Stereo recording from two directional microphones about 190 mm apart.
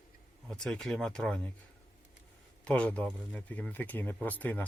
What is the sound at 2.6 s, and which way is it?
Speech, 5° left (ahead or behind).